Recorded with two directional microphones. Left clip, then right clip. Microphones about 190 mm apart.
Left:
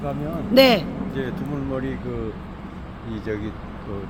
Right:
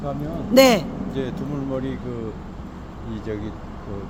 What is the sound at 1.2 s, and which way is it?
Speech, 30° right (ahead or behind).